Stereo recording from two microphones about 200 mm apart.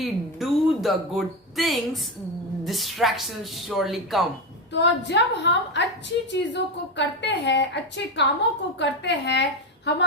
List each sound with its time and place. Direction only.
0.0 s speech: centre (ahead or behind)
4.7 s a woman's voice: 60° left (ahead or behind)